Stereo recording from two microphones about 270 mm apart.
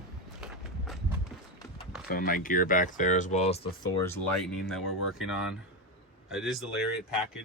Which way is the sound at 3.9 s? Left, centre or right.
Centre.